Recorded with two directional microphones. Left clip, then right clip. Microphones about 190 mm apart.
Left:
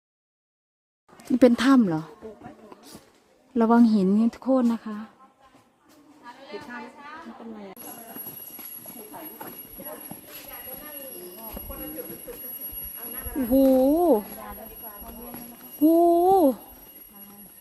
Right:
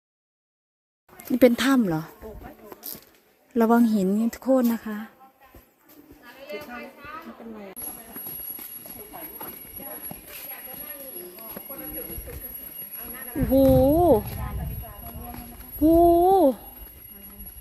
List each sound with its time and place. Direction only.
1.4 s speech: 5° left (ahead or behind)
3.5 s speech: centre (ahead or behind)
11.6 s a sound: 65° right (ahead or behind)
13.5 s speech: 5° right (ahead or behind)
15.8 s babbling: centre (ahead or behind)